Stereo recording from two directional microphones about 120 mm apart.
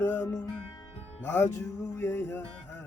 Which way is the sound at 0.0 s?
15° left (ahead or behind).